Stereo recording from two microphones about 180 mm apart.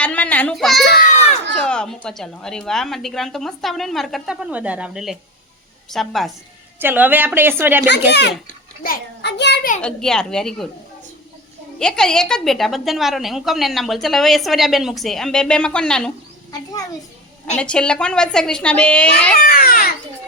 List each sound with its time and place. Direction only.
0.0 s a child's voice: 10° left (ahead or behind)
6.7 s a woman's voice: 10° right (ahead or behind)
7.9 s speech: 70° left (ahead or behind)
8.8 s a sound: 65° left (ahead or behind)
9.8 s a woman's voice: 5° left (ahead or behind)
11.8 s a woman's voice: 5° left (ahead or behind)
17.6 s a woman's voice: 5° left (ahead or behind)
19.4 s speech: 55° left (ahead or behind)